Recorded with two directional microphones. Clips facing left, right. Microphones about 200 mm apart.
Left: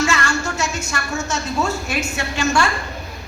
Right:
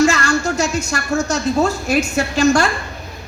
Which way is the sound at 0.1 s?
35° right (ahead or behind).